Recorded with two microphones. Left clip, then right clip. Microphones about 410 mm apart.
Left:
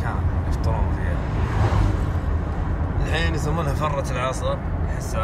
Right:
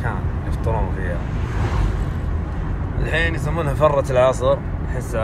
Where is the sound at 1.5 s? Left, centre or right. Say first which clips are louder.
Left 2 dB; centre.